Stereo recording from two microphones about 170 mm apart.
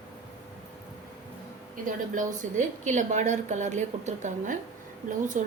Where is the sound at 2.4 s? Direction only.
45° right (ahead or behind).